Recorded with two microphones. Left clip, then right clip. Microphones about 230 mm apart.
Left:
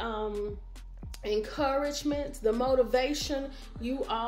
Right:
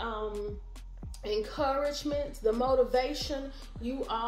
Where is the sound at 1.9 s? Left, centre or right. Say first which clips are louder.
Left 1 dB; left.